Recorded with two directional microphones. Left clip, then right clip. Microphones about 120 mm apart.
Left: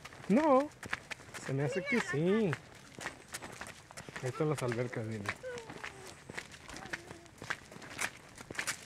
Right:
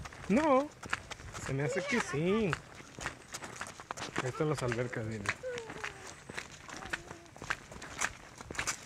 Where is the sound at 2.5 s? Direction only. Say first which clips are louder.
Right 3 dB; 20° left (ahead or behind).